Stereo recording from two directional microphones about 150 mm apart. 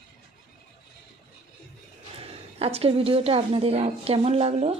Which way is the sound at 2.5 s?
40° right (ahead or behind).